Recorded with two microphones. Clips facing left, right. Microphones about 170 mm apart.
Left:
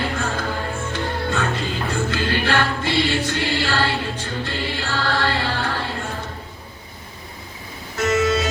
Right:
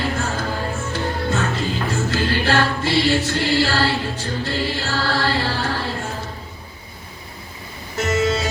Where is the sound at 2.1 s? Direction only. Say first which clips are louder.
Right 3 dB; 40° right (ahead or behind).